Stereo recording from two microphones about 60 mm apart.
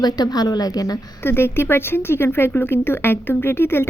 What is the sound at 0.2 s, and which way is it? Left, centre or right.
Speech, left.